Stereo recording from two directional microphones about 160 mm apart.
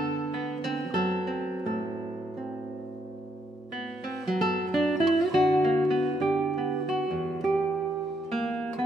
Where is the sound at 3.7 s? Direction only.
Centre (ahead or behind).